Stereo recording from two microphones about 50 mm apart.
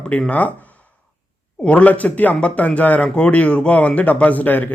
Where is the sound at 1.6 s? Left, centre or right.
Left.